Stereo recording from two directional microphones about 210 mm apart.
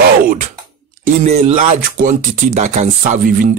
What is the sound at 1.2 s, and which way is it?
Speech, 30° right (ahead or behind).